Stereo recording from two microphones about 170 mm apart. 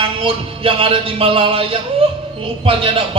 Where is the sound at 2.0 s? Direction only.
35° right (ahead or behind).